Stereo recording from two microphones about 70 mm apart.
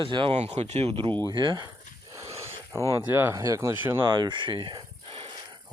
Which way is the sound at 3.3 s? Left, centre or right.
Right.